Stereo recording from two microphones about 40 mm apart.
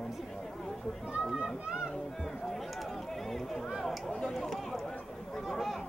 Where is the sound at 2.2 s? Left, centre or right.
Centre.